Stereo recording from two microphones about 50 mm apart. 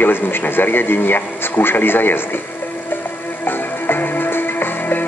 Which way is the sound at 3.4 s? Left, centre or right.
Left.